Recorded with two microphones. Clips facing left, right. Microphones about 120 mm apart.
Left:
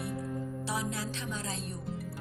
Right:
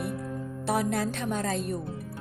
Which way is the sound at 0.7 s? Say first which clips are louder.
Right 11 dB; 55° right (ahead or behind).